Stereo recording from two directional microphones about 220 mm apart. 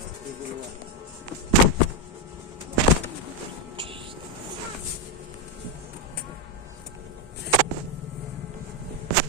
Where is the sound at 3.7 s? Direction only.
25° right (ahead or behind).